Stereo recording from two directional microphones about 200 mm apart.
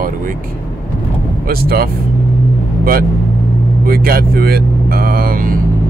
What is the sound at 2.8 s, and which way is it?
Speech, 45° right (ahead or behind).